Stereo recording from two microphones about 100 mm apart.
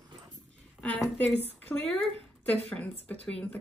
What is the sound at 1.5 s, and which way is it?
Speech, 20° left (ahead or behind).